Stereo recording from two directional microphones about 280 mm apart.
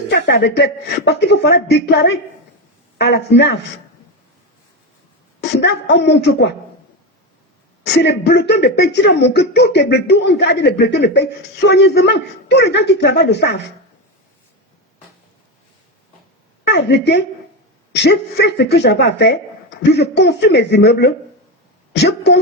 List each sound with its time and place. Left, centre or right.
0.1 s speech: left
5.4 s speech: left
7.9 s speech: left
16.6 s a woman's voice: left